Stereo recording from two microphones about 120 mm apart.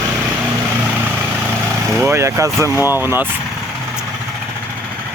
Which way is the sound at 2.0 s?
20° right (ahead or behind).